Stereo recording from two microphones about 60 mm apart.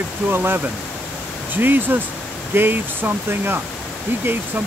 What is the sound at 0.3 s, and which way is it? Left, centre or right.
Speech, right.